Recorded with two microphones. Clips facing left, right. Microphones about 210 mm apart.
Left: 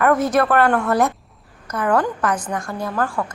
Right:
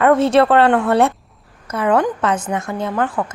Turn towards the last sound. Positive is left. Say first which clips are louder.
# right 3 dB
turn(degrees=-20)  # may be behind; listen again after turning